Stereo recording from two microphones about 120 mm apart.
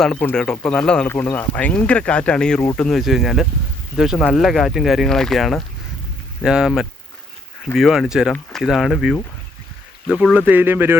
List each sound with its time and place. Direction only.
0.0 s speech: 10° left (ahead or behind)
10.3 s speech: 15° right (ahead or behind)